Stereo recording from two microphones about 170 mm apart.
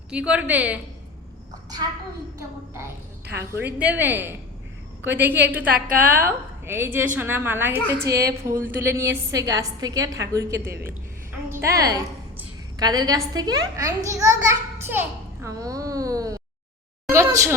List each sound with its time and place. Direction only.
0.1 s a woman's voice: 5° right (ahead or behind)
3.5 s a woman's voice: 10° right (ahead or behind)
5.7 s a woman's voice: 55° right (ahead or behind)
6.2 s a woman's voice: 15° right (ahead or behind)
17.1 s a sound: 15° right (ahead or behind)